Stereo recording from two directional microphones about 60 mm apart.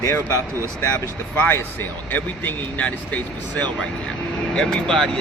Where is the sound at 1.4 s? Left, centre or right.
Left.